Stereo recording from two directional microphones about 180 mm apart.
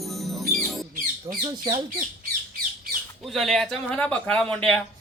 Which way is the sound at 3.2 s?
Centre (ahead or behind).